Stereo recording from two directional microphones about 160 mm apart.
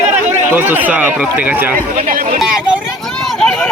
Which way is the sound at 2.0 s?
55° right (ahead or behind).